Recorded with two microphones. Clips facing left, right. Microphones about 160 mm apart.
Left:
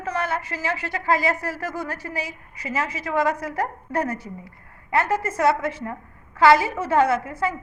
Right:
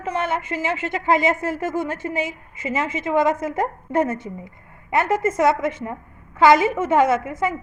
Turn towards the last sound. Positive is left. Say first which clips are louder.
# right 2 dB
turn(degrees=-20)  # may be behind; listen again after turning